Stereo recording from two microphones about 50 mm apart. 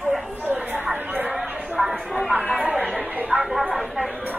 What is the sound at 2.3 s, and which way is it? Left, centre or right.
Chatter, right.